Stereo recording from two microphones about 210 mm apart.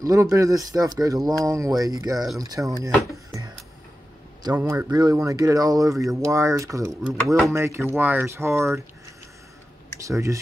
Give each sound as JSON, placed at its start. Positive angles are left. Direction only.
{"t": 0.0, "sound": "speech", "side_deg": -15}
{"t": 4.6, "sound": "speech", "side_deg": -10}
{"t": 10.0, "sound": "speech", "side_deg": -15}